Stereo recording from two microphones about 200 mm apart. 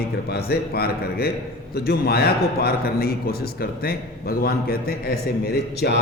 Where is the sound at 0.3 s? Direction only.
50° left (ahead or behind).